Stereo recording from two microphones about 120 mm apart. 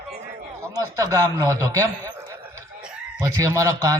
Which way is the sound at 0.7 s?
30° right (ahead or behind).